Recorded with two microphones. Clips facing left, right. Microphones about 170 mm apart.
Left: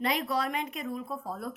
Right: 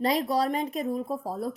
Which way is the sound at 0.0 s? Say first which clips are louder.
Right 5 dB; 35° right (ahead or behind).